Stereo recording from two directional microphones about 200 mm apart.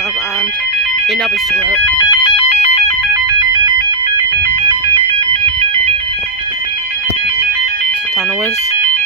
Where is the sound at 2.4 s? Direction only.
35° left (ahead or behind).